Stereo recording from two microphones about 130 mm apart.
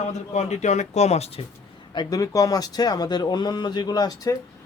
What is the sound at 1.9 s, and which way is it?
Speech, 30° left (ahead or behind).